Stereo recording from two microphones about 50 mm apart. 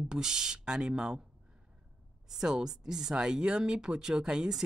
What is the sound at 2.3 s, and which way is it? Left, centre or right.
A woman's voice, centre.